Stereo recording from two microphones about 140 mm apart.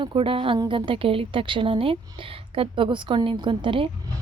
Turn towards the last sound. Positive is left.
turn(degrees=-35)  # may be behind; listen again after turning